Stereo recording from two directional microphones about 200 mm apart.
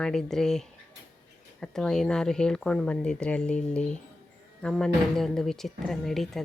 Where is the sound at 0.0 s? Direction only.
Centre (ahead or behind).